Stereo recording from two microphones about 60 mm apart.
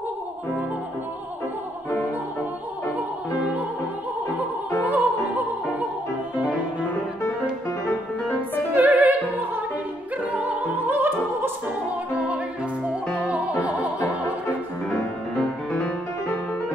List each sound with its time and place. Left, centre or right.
4.8 s opera: right
6.3 s music: right
8.7 s music: right
10.3 s opera: right
10.9 s opera: right
12.1 s music: right